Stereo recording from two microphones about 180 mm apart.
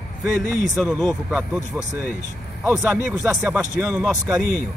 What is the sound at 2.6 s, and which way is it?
Speech, 15° right (ahead or behind).